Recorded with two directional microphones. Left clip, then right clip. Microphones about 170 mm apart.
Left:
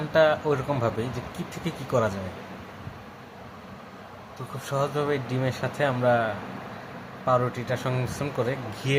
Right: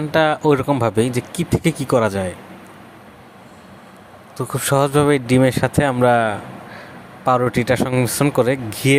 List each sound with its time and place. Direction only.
0.1 s speech: 60° right (ahead or behind)
4.4 s speech: 50° right (ahead or behind)